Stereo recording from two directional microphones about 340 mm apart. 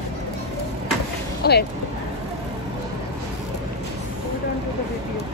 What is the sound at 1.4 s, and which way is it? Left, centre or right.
Speech, left.